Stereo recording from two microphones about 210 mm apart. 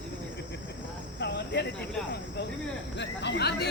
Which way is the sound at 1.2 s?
55° left (ahead or behind).